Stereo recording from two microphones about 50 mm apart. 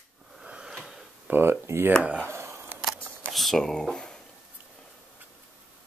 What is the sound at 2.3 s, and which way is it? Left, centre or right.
Camera, right.